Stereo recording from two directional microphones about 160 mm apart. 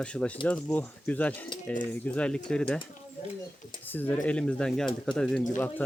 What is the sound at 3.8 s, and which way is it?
Speech, 10° left (ahead or behind).